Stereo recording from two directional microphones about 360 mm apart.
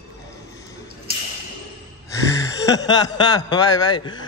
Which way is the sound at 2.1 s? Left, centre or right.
Centre.